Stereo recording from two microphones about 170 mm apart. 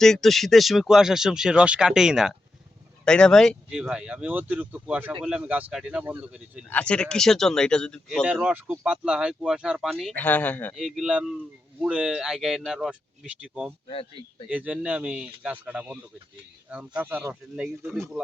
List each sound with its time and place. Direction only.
0.0 s speech: centre (ahead or behind)
6.7 s speech: 5° left (ahead or behind)
8.3 s speech: 5° right (ahead or behind); by 10.8 s 10° left (ahead or behind)
10.8 s speech: centre (ahead or behind)
13.8 s speech: 35° left (ahead or behind)
14.5 s speech: 5° right (ahead or behind)